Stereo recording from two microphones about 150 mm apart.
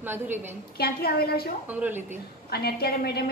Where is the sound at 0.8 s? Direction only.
90° left.